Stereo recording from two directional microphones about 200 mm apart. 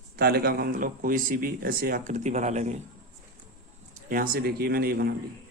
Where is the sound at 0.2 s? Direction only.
50° right (ahead or behind).